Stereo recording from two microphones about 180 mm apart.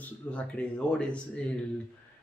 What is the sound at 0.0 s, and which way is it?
Speech, 5° left (ahead or behind).